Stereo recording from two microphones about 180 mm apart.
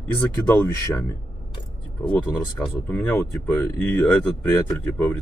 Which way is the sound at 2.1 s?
10° left (ahead or behind).